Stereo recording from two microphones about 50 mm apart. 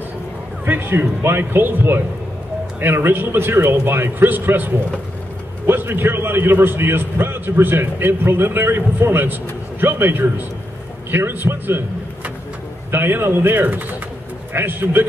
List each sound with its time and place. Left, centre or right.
0.7 s a man's voice: right
8.3 s a man's voice: right
12.9 s a man's voice: right
13.7 s speech: right
14.5 s a man's voice: right